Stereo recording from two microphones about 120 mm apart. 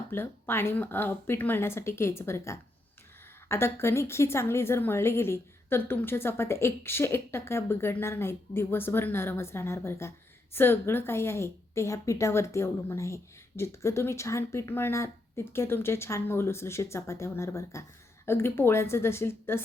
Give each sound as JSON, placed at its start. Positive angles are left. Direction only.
{"t": 0.1, "sound": "a woman's voice", "side_deg": 20}